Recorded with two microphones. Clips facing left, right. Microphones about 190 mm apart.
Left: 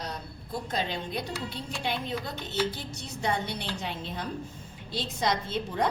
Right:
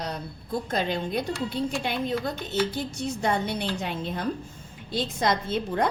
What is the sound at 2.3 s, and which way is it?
A woman's voice, 50° right (ahead or behind).